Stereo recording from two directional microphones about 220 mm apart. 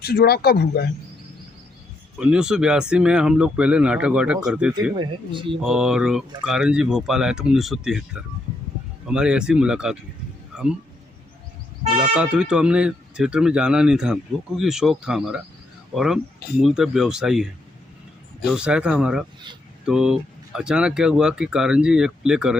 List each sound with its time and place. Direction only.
0.0 s speech: 45° left (ahead or behind)
2.1 s speech: 5° right (ahead or behind)
4.9 s speech: 20° right (ahead or behind)
5.6 s speech: 5° right (ahead or behind)
12.1 s speech: 5° right (ahead or behind)
18.5 s speech: 5° right (ahead or behind)